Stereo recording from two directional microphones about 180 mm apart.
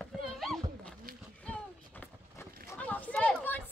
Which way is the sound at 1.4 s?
10° left (ahead or behind).